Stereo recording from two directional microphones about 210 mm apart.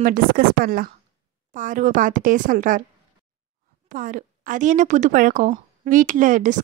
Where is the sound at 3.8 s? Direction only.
40° right (ahead or behind).